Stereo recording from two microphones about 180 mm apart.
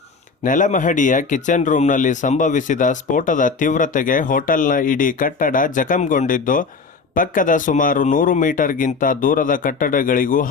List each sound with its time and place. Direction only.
0.4 s speech: 45° left (ahead or behind)